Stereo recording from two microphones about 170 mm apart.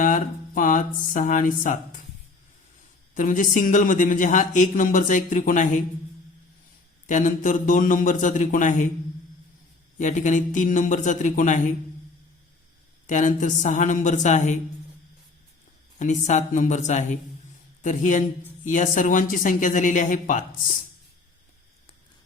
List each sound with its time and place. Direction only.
0.0 s speech: 50° left (ahead or behind)
3.2 s speech: 50° left (ahead or behind)
7.1 s speech: 50° left (ahead or behind)
10.0 s speech: 45° left (ahead or behind)
13.1 s speech: 50° left (ahead or behind)
16.0 s speech: 45° left (ahead or behind)